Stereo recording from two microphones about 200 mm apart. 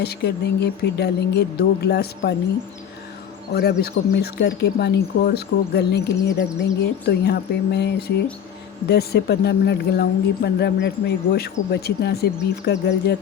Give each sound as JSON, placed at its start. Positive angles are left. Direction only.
{"t": 0.0, "sound": "speech", "side_deg": 55}
{"t": 3.5, "sound": "speech", "side_deg": 55}